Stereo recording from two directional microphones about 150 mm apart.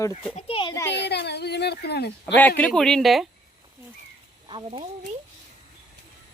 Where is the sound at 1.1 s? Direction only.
90° left.